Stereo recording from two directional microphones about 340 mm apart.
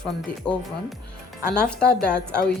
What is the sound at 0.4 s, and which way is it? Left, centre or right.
Speech, centre.